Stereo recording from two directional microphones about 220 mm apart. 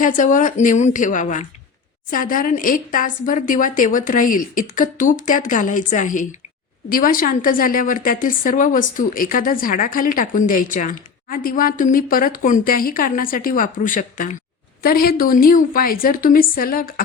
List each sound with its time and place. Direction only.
0.0 s a woman's voice: 35° left (ahead or behind)